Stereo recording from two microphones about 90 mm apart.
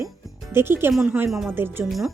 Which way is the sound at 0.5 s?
25° right (ahead or behind).